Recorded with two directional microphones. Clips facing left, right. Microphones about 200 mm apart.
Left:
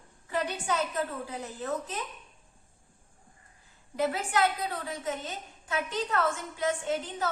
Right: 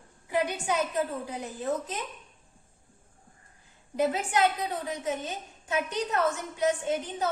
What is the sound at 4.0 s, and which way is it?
A woman's voice, 20° right (ahead or behind).